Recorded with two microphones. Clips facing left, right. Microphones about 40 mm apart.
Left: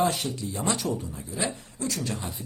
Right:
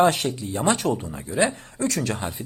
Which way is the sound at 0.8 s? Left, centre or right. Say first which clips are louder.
Right 5 dB; right.